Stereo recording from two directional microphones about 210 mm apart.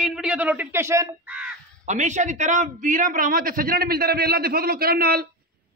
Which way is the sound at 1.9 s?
35° right (ahead or behind).